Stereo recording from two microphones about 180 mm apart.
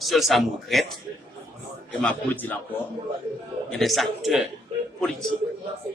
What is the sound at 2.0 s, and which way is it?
Speech, 10° left (ahead or behind).